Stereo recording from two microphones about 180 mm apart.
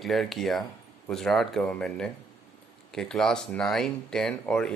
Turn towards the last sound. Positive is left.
turn(degrees=5)  # may be behind; listen again after turning